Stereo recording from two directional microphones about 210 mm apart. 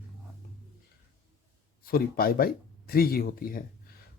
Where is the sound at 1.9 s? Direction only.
45° left (ahead or behind).